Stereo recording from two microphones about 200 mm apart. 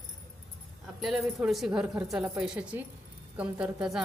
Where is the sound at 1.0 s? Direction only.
Centre (ahead or behind).